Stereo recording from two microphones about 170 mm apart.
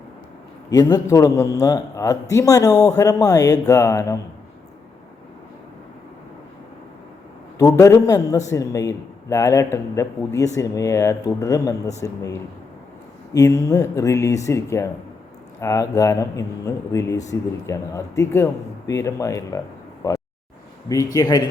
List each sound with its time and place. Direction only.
0.7 s speech: 20° left (ahead or behind)
7.6 s speech: 20° left (ahead or behind)
20.9 s speech: 20° left (ahead or behind)